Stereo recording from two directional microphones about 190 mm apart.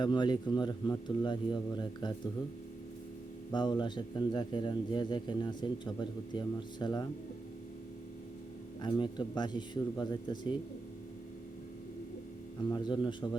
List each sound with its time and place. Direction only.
0.0 s speech: 25° left (ahead or behind)
3.5 s speech: 25° left (ahead or behind)
8.8 s speech: 25° left (ahead or behind)
12.6 s speech: 20° left (ahead or behind)